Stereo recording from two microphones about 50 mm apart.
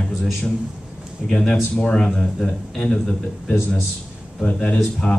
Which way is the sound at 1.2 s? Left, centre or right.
Centre.